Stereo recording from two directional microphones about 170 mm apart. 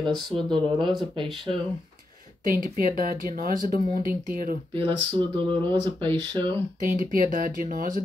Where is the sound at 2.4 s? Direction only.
55° right (ahead or behind).